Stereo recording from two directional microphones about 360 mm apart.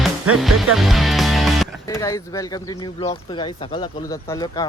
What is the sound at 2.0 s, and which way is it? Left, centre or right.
Speech, centre.